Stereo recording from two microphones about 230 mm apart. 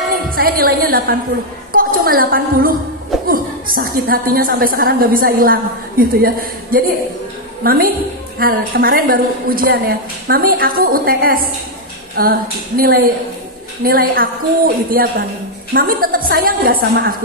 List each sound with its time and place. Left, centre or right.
0.4 s a woman's voice: right